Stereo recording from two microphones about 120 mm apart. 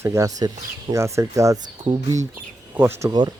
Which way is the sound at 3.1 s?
35° right (ahead or behind).